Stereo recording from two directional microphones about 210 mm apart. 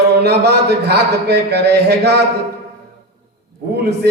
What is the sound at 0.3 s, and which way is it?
A man's voice, 50° right (ahead or behind).